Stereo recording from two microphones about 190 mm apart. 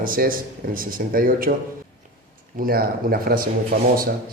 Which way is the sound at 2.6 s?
50° right (ahead or behind).